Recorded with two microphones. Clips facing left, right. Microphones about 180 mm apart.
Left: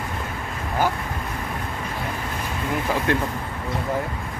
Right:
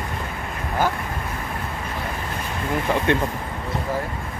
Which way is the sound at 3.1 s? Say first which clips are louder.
Right 2 dB; centre (ahead or behind).